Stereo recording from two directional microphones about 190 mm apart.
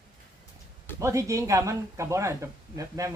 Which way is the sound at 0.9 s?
15° right (ahead or behind).